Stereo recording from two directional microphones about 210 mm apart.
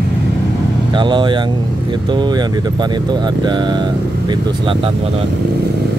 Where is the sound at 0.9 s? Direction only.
20° right (ahead or behind).